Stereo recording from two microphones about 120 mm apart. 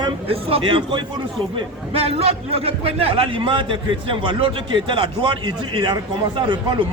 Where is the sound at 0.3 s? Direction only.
50° right (ahead or behind).